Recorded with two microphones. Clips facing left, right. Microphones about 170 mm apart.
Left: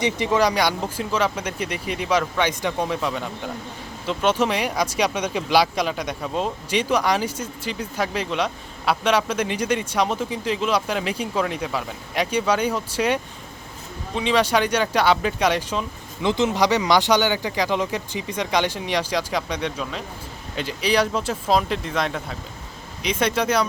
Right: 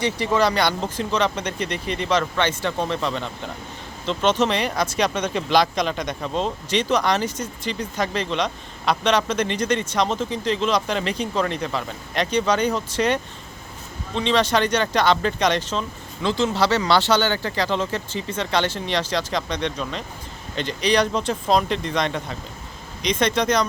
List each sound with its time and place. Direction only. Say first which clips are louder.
0.0 s speech: even; 15° left (ahead or behind)